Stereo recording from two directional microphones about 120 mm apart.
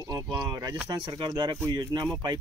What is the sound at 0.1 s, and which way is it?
Speech, 35° right (ahead or behind).